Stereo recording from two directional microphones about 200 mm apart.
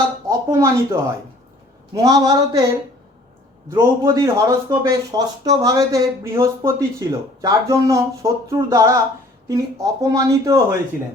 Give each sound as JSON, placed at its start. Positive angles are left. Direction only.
{"t": 0.3, "sound": "a sound", "side_deg": -15}
{"t": 2.0, "sound": "a man's voice", "side_deg": -20}
{"t": 3.7, "sound": "speech", "side_deg": -15}